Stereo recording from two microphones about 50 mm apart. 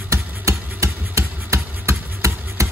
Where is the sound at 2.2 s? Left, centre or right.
Right.